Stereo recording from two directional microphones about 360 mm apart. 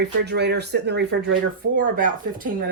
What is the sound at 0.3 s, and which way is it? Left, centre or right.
Speech, right.